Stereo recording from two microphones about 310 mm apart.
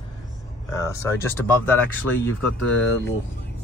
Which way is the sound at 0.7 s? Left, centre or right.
Centre.